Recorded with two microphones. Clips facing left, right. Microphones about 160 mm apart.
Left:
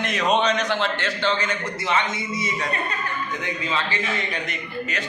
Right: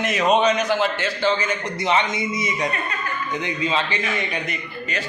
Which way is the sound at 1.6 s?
20° right (ahead or behind).